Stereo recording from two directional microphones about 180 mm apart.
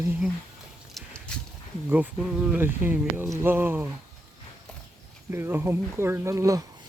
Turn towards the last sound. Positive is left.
turn(degrees=-15)  # may be behind; listen again after turning